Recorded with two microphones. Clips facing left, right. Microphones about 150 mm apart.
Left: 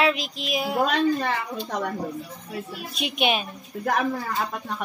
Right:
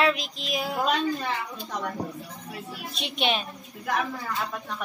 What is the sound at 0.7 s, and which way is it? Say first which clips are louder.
A woman's voice: left 5 dB; 55° left (ahead or behind).